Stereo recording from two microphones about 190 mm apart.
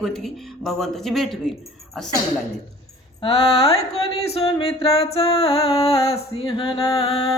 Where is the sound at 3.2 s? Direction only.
30° left (ahead or behind).